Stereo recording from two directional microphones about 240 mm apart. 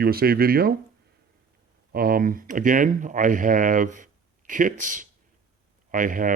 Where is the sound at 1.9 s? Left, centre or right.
Right.